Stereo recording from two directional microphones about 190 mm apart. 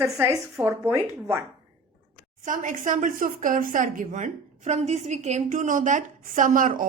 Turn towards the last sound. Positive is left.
turn(degrees=-45)  # may be behind; listen again after turning